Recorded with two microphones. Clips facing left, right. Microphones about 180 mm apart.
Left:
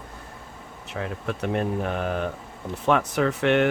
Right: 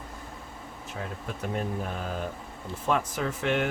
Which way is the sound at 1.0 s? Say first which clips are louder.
Left 7 dB; 75° left (ahead or behind).